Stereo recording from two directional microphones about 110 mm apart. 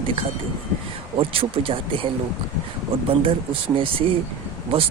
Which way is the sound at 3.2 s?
55° right (ahead or behind).